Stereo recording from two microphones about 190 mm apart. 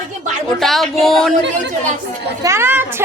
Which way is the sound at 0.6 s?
Centre (ahead or behind).